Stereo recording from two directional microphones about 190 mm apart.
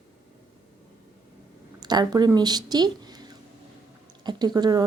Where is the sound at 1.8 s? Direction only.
20° right (ahead or behind).